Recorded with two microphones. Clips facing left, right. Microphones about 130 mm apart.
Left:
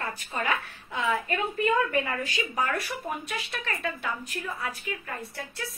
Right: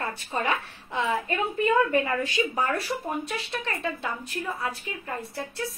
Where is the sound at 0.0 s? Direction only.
25° right (ahead or behind).